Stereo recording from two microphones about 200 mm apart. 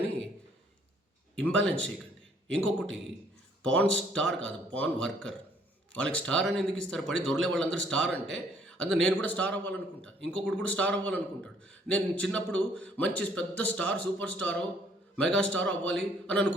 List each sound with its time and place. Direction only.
1.4 s a man's voice: 5° left (ahead or behind)